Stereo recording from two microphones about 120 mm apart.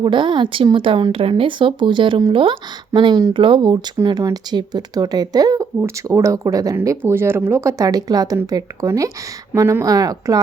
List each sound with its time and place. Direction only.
0.0 s speech: 40° right (ahead or behind)